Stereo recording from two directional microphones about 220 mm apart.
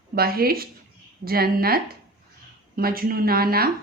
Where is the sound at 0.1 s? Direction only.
45° right (ahead or behind).